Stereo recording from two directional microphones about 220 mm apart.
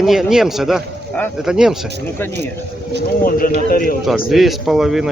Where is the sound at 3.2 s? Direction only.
40° left (ahead or behind).